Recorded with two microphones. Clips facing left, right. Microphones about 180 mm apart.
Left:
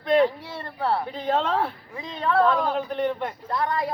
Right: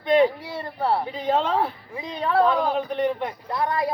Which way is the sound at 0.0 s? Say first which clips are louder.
Right 1 dB; centre (ahead or behind).